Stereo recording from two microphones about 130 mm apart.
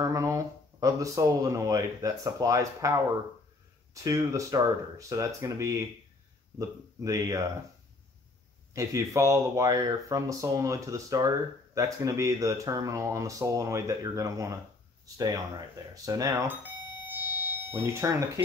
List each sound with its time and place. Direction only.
0.0 s speech: 25° right (ahead or behind)
7.0 s speech: 25° right (ahead or behind)
8.7 s speech: 25° right (ahead or behind)
16.9 s fire alarm: 15° right (ahead or behind)